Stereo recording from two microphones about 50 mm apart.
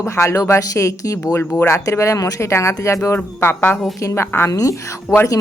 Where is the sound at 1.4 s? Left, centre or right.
Left.